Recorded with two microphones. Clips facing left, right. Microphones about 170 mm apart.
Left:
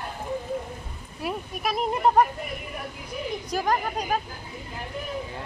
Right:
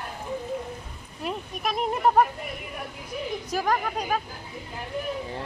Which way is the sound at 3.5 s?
5° right (ahead or behind).